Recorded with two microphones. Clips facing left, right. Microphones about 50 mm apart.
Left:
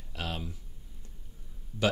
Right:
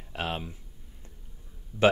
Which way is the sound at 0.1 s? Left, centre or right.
Right.